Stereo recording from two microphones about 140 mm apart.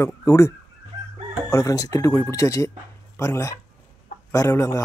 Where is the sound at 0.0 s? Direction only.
20° left (ahead or behind).